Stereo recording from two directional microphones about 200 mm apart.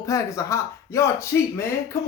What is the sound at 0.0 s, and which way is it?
Speech, 15° left (ahead or behind).